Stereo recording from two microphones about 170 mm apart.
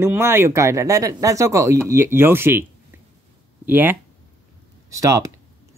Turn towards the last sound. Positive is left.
turn(degrees=-20)  # may be behind; listen again after turning